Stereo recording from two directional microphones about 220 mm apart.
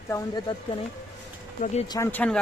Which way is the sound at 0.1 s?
20° left (ahead or behind).